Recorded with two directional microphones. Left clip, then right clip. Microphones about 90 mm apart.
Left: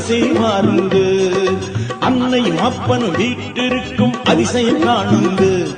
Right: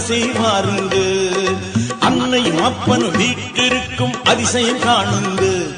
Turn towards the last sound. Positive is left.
turn(degrees=-35)  # may be behind; listen again after turning